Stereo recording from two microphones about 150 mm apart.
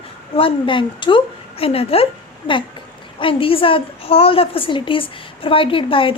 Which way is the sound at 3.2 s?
35° left (ahead or behind).